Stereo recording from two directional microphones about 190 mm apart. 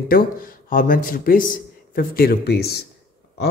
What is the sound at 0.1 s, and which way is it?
Speech, 45° left (ahead or behind).